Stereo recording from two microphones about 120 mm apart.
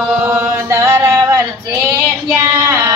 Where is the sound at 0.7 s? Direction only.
20° right (ahead or behind).